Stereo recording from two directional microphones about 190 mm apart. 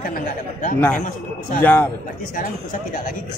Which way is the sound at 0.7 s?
5° left (ahead or behind).